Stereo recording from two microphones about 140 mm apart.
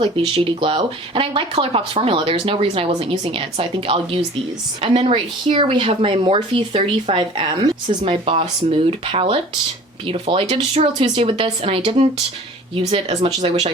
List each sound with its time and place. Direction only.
0.0 s speech: 40° right (ahead or behind)